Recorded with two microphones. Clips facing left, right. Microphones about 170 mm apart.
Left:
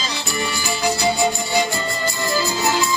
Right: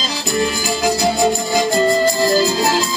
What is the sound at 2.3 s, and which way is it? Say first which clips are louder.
Music: right 5 dB; 90° right.